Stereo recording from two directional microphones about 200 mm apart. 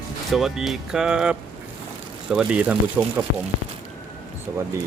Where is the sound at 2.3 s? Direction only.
5° right (ahead or behind).